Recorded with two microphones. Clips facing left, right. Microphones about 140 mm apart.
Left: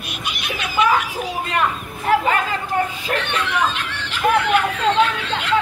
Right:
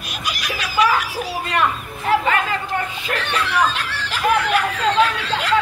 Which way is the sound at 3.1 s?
35° right (ahead or behind).